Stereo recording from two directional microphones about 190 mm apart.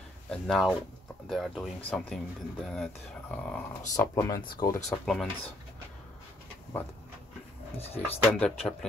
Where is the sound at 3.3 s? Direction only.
5° left (ahead or behind).